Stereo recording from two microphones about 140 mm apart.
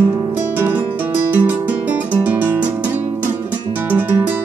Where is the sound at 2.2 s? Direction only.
10° right (ahead or behind).